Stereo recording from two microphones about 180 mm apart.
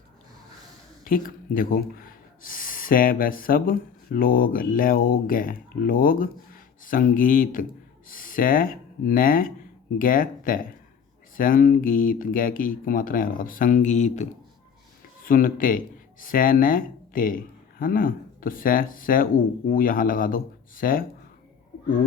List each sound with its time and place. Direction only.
1.0 s speech: 50° left (ahead or behind)